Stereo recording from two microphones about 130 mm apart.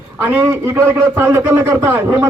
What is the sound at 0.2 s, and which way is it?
A man's voice, 15° right (ahead or behind).